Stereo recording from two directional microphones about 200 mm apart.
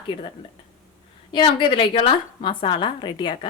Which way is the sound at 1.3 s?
25° left (ahead or behind).